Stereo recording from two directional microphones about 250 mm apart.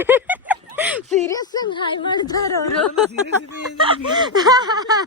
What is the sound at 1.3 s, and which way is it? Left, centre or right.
Speech, centre.